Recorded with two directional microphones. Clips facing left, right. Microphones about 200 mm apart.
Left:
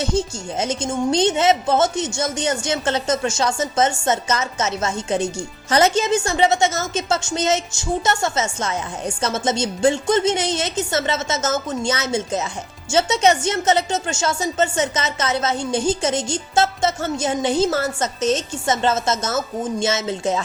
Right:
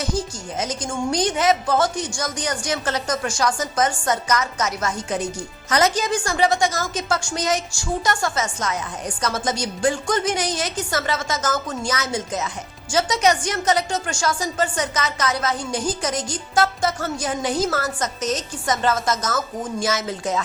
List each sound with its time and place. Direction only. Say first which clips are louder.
0.0 s speech: left 4 dB; 25° left (ahead or behind)